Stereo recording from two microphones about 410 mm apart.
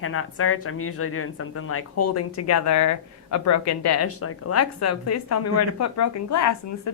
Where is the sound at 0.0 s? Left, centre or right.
Left.